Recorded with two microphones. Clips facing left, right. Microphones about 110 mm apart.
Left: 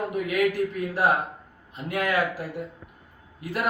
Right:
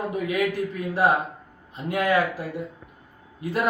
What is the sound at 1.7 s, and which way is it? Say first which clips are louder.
A man's voice: right 3 dB; 25° right (ahead or behind).